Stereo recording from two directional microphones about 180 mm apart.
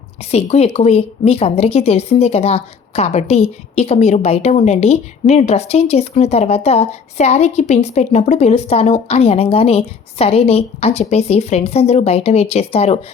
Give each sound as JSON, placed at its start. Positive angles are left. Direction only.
{"t": 0.3, "sound": "speech", "side_deg": 35}